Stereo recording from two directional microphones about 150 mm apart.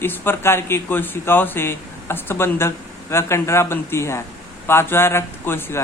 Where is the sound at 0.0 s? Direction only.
15° left (ahead or behind).